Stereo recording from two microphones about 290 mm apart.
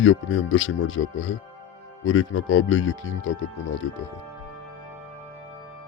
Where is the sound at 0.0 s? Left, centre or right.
Left.